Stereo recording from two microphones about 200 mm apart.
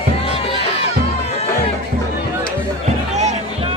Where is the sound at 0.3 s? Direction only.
30° left (ahead or behind).